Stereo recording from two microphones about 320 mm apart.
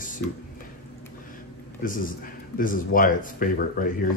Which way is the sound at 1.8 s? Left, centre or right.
Left.